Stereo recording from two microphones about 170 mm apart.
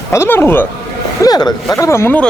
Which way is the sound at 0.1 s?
15° left (ahead or behind).